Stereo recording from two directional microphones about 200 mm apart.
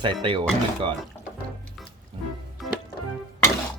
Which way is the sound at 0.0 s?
25° right (ahead or behind).